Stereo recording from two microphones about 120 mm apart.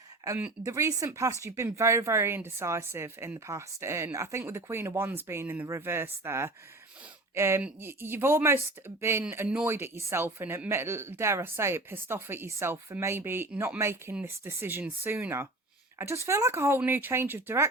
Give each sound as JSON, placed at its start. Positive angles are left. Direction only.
{"t": 0.6, "sound": "speech", "side_deg": -25}